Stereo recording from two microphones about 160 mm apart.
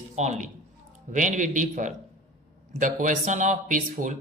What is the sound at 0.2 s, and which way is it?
A man's voice, 50° right (ahead or behind).